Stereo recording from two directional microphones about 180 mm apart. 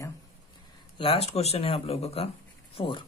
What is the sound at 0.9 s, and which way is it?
Speech, 30° left (ahead or behind).